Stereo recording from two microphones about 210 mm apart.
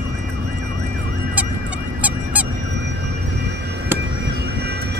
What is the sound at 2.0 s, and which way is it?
Honk, 5° right (ahead or behind).